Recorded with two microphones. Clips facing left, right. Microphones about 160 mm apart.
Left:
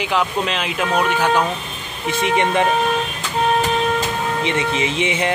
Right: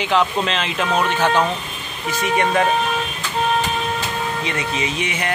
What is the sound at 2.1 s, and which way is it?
Speech, 25° left (ahead or behind).